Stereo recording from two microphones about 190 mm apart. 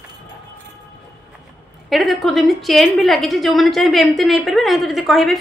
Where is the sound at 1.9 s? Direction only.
Centre (ahead or behind).